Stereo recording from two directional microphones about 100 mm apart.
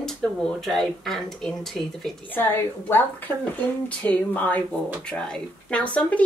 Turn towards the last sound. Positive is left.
turn(degrees=15)  # may be behind; listen again after turning